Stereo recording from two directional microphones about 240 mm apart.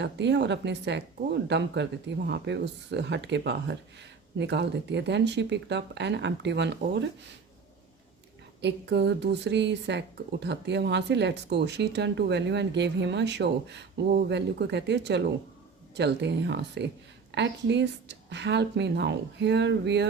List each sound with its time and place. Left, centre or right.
0.0 s speech: right
8.6 s speech: right